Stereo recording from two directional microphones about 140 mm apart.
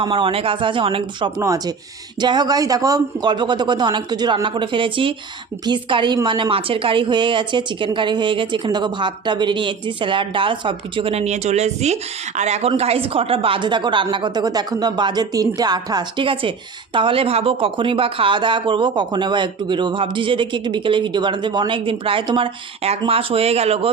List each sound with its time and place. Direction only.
0.0 s speech: 40° right (ahead or behind)
1.4 s speech: 25° right (ahead or behind); by 23.9 s 45° right (ahead or behind)